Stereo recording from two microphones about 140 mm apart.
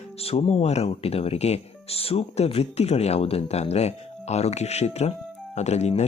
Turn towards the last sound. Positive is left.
turn(degrees=55)  # may be behind; listen again after turning